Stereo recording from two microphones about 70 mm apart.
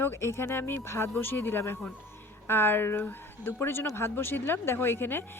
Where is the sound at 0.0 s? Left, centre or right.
Left.